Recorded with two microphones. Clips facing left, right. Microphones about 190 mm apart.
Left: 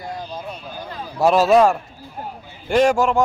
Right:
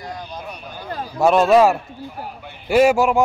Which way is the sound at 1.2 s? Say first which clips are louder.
Right 1 dB; centre (ahead or behind).